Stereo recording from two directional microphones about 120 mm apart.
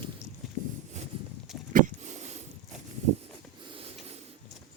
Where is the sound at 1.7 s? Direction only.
75° right (ahead or behind).